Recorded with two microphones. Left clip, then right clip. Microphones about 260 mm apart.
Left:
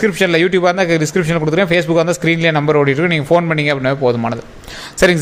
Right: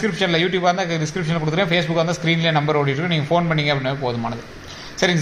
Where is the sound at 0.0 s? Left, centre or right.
Left.